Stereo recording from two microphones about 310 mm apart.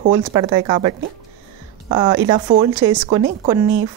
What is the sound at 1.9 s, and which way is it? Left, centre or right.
Speech, centre.